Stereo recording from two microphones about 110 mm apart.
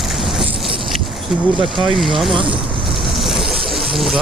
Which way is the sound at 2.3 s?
50° right (ahead or behind).